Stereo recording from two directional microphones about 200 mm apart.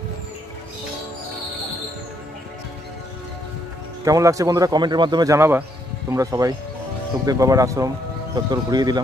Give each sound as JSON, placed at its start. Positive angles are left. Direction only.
{"t": 4.0, "sound": "a man's voice", "side_deg": -15}